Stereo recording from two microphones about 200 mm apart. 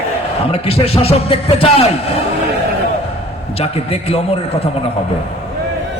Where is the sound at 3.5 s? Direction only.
30° left (ahead or behind).